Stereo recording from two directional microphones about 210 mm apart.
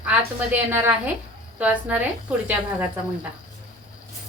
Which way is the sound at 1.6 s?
5° right (ahead or behind).